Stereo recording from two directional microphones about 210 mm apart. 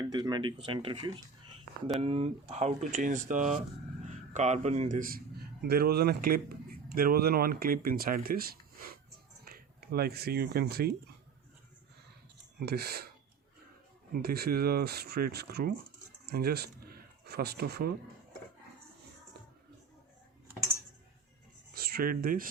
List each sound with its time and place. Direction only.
0.0 s speech: 20° right (ahead or behind); by 10.9 s 45° right (ahead or behind)
12.5 s speech: 50° right (ahead or behind)
14.1 s speech: 45° right (ahead or behind)
21.7 s a sound: 45° right (ahead or behind)